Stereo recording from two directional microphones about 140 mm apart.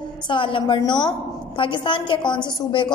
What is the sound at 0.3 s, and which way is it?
A woman's voice, 35° left (ahead or behind).